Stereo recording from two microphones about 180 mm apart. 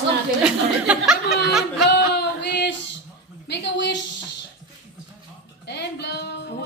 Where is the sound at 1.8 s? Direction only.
70° left (ahead or behind).